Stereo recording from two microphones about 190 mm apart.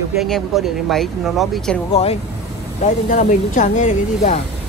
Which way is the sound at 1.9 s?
35° left (ahead or behind).